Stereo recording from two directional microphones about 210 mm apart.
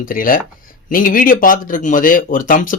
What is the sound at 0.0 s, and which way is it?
Speech, 40° left (ahead or behind).